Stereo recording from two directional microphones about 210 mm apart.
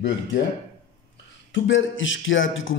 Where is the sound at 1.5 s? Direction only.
60° left (ahead or behind).